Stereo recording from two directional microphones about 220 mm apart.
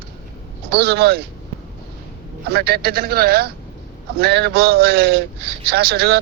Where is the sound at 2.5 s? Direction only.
45° right (ahead or behind).